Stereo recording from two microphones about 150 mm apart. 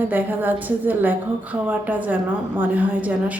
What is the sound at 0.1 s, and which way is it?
A woman's voice, 10° right (ahead or behind).